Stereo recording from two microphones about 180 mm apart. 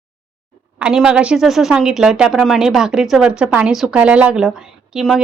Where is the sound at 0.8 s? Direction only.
5° right (ahead or behind).